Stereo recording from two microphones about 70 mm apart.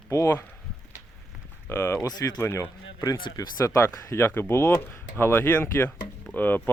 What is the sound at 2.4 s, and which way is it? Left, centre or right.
Speech, left.